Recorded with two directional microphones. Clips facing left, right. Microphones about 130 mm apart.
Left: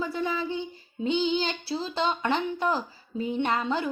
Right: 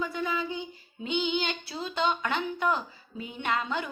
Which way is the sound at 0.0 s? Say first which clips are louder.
Left 2 dB; 30° left (ahead or behind).